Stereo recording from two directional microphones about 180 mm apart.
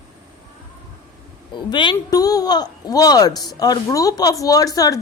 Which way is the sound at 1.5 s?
25° left (ahead or behind).